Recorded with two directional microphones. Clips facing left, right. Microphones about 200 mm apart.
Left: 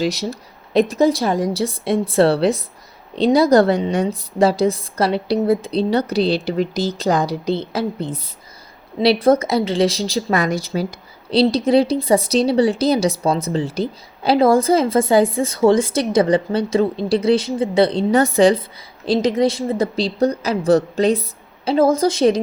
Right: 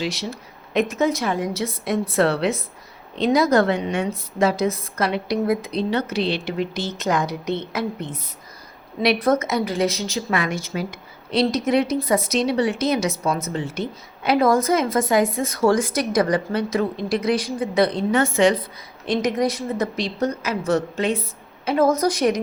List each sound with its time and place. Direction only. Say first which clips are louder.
0.0 s a woman's voice: left 6 dB; 40° left (ahead or behind)